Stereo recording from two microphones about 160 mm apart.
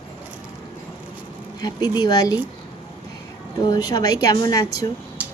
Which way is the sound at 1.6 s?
25° left (ahead or behind).